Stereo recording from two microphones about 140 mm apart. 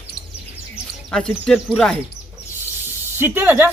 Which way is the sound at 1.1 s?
5° left (ahead or behind).